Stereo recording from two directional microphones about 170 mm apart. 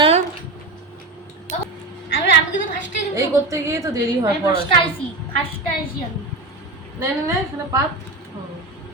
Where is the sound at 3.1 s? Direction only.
20° right (ahead or behind).